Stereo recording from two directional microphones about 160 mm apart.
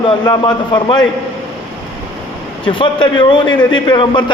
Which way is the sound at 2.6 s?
30° left (ahead or behind).